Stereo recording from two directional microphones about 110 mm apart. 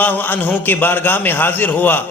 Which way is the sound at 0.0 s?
15° left (ahead or behind).